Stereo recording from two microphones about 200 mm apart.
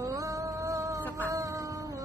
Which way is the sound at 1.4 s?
15° right (ahead or behind).